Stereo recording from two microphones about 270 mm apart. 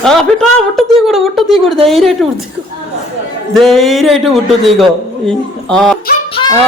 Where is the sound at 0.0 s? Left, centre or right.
Centre.